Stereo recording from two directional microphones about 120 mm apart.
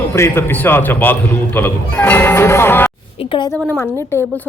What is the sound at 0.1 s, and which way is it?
A man's voice, 20° left (ahead or behind).